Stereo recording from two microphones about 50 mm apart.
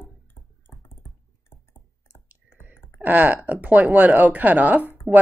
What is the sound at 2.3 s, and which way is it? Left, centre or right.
Clicking, right.